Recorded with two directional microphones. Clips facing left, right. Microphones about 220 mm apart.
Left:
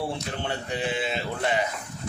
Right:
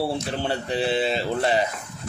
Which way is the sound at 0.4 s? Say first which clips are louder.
Right 4 dB; 35° right (ahead or behind).